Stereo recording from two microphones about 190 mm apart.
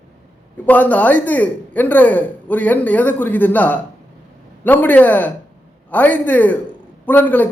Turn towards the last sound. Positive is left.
turn(degrees=10)  # may be behind; listen again after turning